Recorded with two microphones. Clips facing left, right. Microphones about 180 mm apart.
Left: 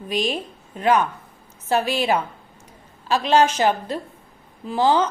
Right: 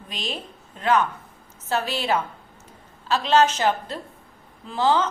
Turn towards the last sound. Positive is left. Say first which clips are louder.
# left 3 dB
turn(degrees=15)  # may be behind; listen again after turning